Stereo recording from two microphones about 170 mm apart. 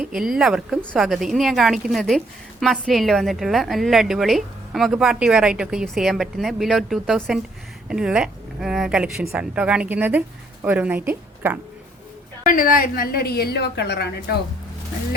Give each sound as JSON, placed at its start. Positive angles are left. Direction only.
{"t": 0.0, "sound": "a woman's voice", "side_deg": -5}
{"t": 12.5, "sound": "a woman's voice", "side_deg": 55}